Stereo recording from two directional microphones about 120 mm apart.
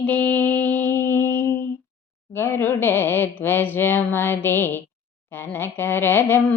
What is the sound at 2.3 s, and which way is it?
Speech, 20° left (ahead or behind).